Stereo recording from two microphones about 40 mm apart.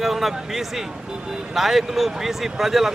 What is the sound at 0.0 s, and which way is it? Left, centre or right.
Speech, centre.